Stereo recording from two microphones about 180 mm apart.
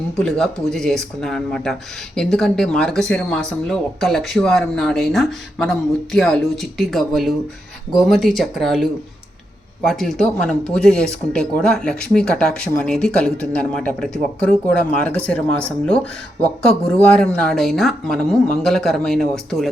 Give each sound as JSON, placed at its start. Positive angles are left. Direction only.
{"t": 0.2, "sound": "speech", "side_deg": 5}